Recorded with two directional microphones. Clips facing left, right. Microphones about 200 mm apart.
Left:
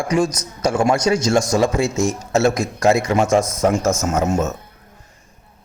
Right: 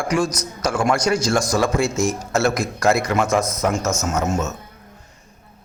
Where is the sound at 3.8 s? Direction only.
50° left (ahead or behind).